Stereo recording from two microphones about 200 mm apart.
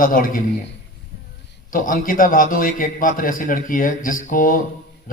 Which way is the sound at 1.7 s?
45° left (ahead or behind).